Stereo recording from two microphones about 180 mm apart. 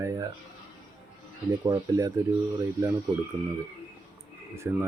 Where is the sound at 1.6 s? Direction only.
20° right (ahead or behind).